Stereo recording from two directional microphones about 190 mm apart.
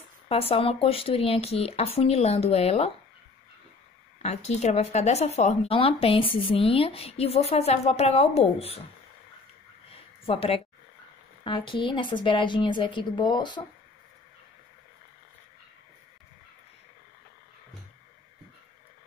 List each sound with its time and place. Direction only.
0.3 s speech: 30° left (ahead or behind)
4.2 s speech: 35° left (ahead or behind)
9.8 s a sound: 30° left (ahead or behind)
11.4 s a woman's voice: 25° left (ahead or behind)